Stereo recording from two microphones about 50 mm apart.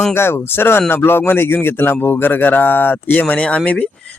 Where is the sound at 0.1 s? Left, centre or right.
Left.